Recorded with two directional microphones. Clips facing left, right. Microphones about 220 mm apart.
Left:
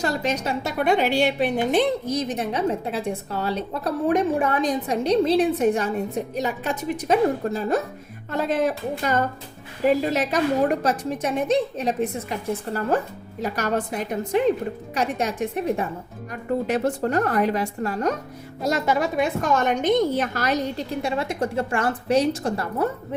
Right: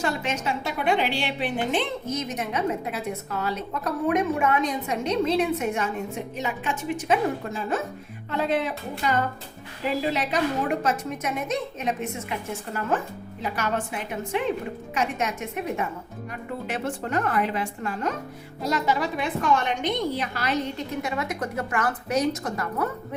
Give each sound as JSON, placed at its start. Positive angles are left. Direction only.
{"t": 0.0, "sound": "a woman's voice", "side_deg": 35}